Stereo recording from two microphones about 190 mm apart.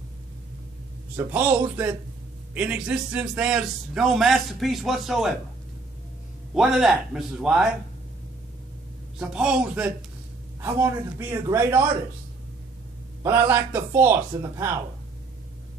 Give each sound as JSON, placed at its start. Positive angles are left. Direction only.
{"t": 1.1, "sound": "a man's voice", "side_deg": -10}
{"t": 6.5, "sound": "a man's voice", "side_deg": -5}
{"t": 9.2, "sound": "a man's voice", "side_deg": -5}
{"t": 13.2, "sound": "a man's voice", "side_deg": -15}